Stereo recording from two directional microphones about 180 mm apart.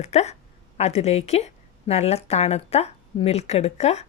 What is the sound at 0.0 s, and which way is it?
Speech, 40° left (ahead or behind).